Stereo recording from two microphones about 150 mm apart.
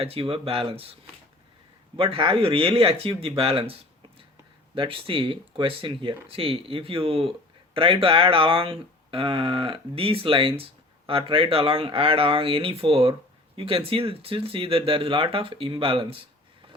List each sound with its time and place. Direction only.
0.0 s speech: 40° right (ahead or behind)
2.0 s speech: 35° right (ahead or behind)